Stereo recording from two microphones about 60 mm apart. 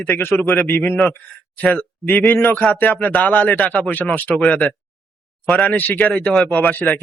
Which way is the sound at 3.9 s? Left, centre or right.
Left.